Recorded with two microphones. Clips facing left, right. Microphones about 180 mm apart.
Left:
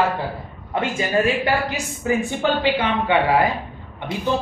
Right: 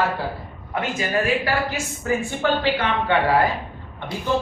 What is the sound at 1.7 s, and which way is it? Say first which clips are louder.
A man's voice: left 2 dB; 15° left (ahead or behind).